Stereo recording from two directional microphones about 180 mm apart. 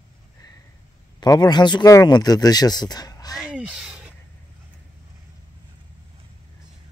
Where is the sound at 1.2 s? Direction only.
25° left (ahead or behind).